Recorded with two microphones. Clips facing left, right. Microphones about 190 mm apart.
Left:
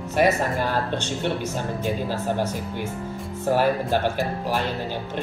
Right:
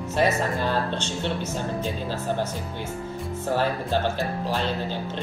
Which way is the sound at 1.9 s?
10° left (ahead or behind).